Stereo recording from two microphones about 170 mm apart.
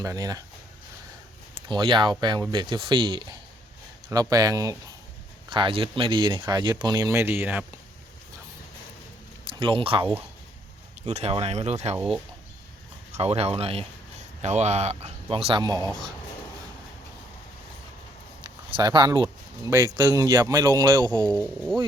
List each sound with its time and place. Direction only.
0.0 s speech: 20° right (ahead or behind)
1.6 s speech: 30° right (ahead or behind); by 7.6 s 15° right (ahead or behind)
9.4 s speech: 30° right (ahead or behind)
11.1 s speech: 35° right (ahead or behind)
11.9 s speech: 5° right (ahead or behind)
13.1 s speech: 40° right (ahead or behind)
18.4 s speech: 25° right (ahead or behind)
21.2 s speech: 5° left (ahead or behind)